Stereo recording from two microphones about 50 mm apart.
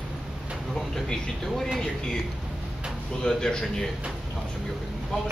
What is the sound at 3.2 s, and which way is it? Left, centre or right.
Speech, centre.